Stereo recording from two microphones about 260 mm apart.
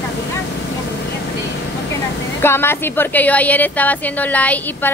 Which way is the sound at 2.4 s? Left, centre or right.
Centre.